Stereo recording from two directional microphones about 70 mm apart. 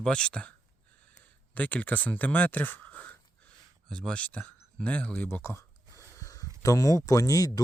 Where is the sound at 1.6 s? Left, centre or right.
Left.